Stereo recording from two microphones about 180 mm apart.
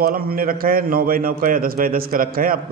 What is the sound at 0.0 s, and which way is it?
A man's voice, 55° right (ahead or behind).